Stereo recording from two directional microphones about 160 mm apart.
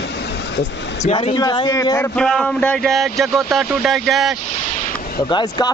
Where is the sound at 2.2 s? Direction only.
5° left (ahead or behind).